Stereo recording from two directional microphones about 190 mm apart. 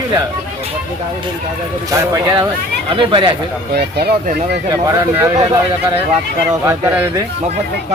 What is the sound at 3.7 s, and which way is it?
Speech, 60° right (ahead or behind).